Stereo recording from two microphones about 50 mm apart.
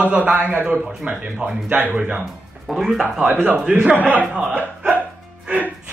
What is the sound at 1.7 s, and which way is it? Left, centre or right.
Speech, right.